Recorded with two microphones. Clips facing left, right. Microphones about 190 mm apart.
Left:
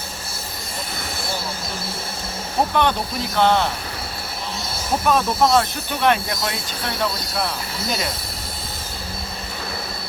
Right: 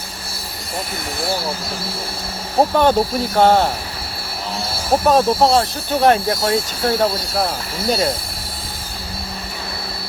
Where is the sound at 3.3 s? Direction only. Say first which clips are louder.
Right 4 dB; 45° right (ahead or behind).